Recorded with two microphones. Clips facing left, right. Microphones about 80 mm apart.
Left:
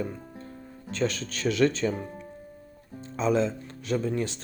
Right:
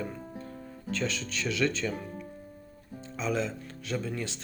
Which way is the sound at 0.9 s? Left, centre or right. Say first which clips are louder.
Left 4 dB; left.